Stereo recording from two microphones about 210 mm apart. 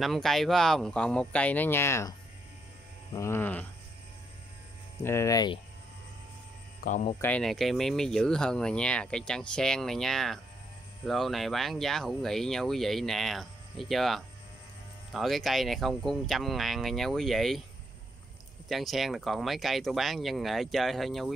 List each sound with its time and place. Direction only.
0.0 s speech: centre (ahead or behind)
5.0 s speech: 15° left (ahead or behind)
6.8 s speech: 40° left (ahead or behind)
7.2 s speech: 5° left (ahead or behind)
18.7 s speech: centre (ahead or behind)